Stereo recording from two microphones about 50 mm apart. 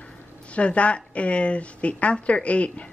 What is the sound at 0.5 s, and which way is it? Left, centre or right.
A woman's voice, left.